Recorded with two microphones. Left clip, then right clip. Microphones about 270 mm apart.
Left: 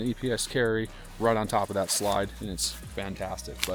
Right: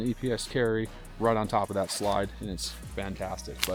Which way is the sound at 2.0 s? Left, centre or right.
Left.